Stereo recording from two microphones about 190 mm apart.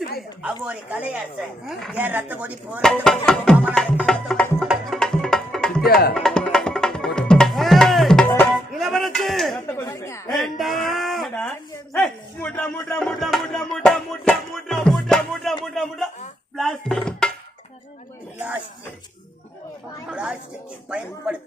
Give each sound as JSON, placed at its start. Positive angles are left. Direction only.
{"t": 0.6, "sound": "music", "side_deg": -5}
{"t": 2.0, "sound": "chopping", "side_deg": -10}
{"t": 2.8, "sound": "music", "side_deg": 5}
{"t": 5.8, "sound": "music", "side_deg": 55}
{"t": 6.1, "sound": "music", "side_deg": 5}
{"t": 8.8, "sound": "a sound", "side_deg": 0}
{"t": 9.7, "sound": "speech", "side_deg": 15}
{"t": 10.3, "sound": "a sound", "side_deg": 0}
{"t": 11.9, "sound": "speech", "side_deg": 5}
{"t": 15.6, "sound": "music", "side_deg": 0}
{"t": 16.6, "sound": "speech", "side_deg": 0}
{"t": 20.1, "sound": "music", "side_deg": -5}